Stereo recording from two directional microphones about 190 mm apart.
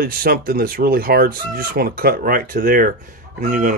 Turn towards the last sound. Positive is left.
turn(degrees=-45)  # may be behind; listen again after turning